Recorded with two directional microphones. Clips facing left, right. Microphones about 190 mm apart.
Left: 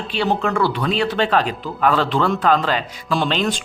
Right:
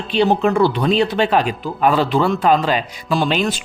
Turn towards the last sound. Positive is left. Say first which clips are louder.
# right 2 dB
turn(degrees=-10)  # may be behind; listen again after turning